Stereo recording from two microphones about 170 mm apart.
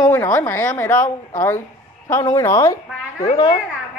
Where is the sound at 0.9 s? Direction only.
50° left (ahead or behind).